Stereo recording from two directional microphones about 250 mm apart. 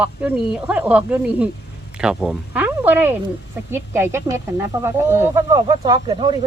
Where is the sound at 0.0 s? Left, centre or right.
Centre.